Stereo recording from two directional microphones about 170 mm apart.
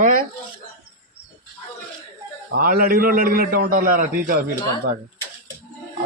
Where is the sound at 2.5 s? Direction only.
60° right (ahead or behind).